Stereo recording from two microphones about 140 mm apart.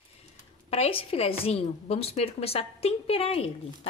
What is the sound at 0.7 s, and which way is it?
A woman's voice, 45° left (ahead or behind).